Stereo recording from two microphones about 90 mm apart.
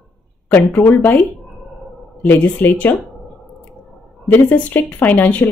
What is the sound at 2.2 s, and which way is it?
Speech, 20° left (ahead or behind).